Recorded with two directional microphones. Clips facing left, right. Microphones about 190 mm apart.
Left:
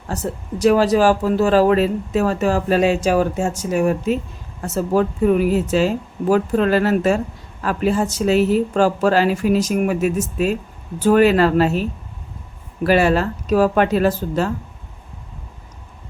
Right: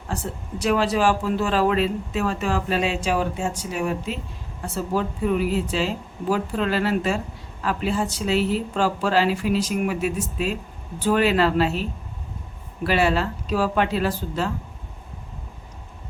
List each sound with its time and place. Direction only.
0.1 s speech: 40° left (ahead or behind)